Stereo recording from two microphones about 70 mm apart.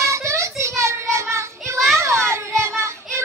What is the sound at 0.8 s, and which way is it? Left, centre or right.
Child singing, right.